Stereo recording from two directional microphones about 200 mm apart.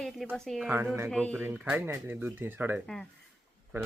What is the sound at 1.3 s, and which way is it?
Speech, 10° right (ahead or behind).